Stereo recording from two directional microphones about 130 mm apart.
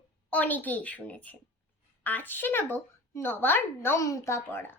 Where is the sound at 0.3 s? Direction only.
10° left (ahead or behind).